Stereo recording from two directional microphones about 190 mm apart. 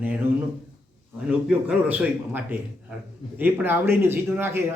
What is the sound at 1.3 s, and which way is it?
A man's voice, 5° right (ahead or behind).